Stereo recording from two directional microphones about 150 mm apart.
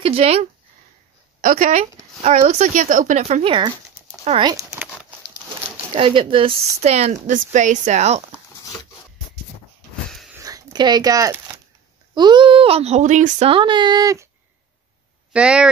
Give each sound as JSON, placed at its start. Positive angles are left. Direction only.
{"t": 0.0, "sound": "speech", "side_deg": -40}
{"t": 1.4, "sound": "speech", "side_deg": -65}
{"t": 4.4, "sound": "a sound", "side_deg": -25}
{"t": 5.9, "sound": "speech", "side_deg": -35}
{"t": 6.8, "sound": "speech", "side_deg": -45}
{"t": 10.4, "sound": "a sound", "side_deg": -25}
{"t": 12.1, "sound": "speech", "side_deg": -30}
{"t": 13.5, "sound": "a sound", "side_deg": -35}
{"t": 15.3, "sound": "speech", "side_deg": -5}